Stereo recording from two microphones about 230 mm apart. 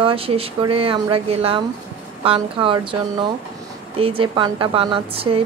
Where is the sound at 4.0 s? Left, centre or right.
Right.